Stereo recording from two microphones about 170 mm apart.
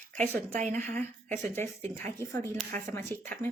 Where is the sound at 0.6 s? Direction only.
45° right (ahead or behind).